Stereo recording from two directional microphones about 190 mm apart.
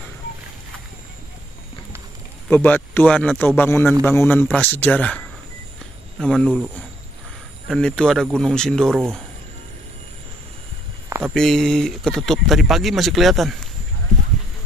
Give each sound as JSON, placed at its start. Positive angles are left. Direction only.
{"t": 2.5, "sound": "speech", "side_deg": 10}
{"t": 7.6, "sound": "speech", "side_deg": 5}
{"t": 8.9, "sound": "speech", "side_deg": -15}
{"t": 11.1, "sound": "a sound", "side_deg": -15}
{"t": 11.3, "sound": "speech", "side_deg": 0}